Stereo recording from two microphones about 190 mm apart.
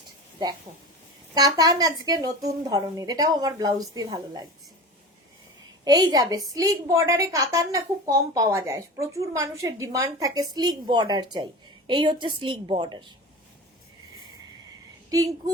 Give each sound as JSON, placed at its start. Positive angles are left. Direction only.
{"t": 1.3, "sound": "a woman's voice", "side_deg": -20}
{"t": 5.8, "sound": "a woman's voice", "side_deg": -20}